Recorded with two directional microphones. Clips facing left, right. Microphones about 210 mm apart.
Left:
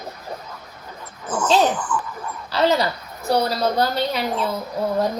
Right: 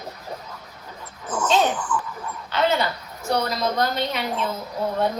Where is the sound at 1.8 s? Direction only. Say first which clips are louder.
Left 1 dB; 50° left (ahead or behind).